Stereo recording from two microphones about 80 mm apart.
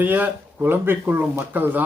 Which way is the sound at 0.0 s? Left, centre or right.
Right.